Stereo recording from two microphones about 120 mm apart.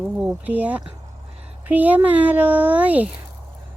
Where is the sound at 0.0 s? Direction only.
10° right (ahead or behind).